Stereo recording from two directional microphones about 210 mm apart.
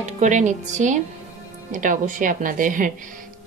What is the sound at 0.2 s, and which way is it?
Speech, 35° right (ahead or behind).